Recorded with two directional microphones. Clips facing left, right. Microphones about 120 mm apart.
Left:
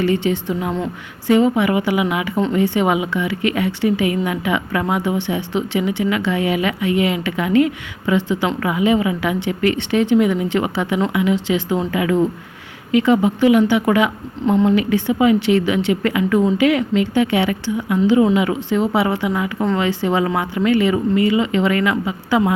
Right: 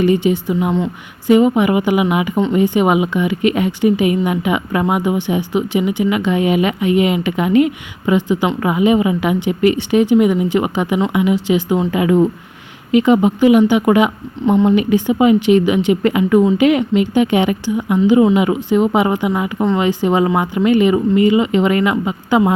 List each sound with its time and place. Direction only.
0.0 s a woman's voice: 15° right (ahead or behind)